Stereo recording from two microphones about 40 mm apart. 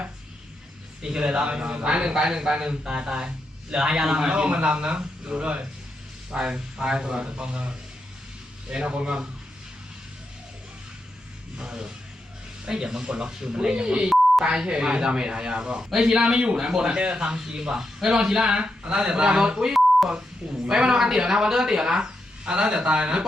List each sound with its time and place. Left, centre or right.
1.0 s a man's voice: right
6.3 s a man's voice: centre
8.7 s a man's voice: right
11.5 s a man's voice: centre